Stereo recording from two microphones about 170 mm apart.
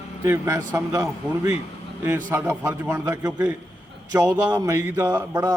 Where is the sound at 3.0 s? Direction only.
20° right (ahead or behind).